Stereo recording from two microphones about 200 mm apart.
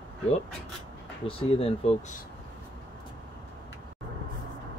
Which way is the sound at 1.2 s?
25° left (ahead or behind).